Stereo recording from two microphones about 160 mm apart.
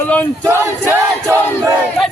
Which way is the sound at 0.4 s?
15° right (ahead or behind).